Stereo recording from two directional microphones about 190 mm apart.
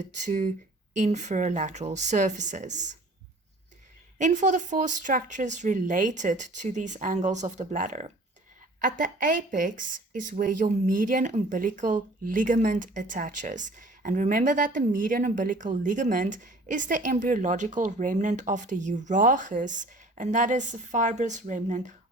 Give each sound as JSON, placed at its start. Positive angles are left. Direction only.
{"t": 0.0, "sound": "speech", "side_deg": -40}
{"t": 4.2, "sound": "speech", "side_deg": -40}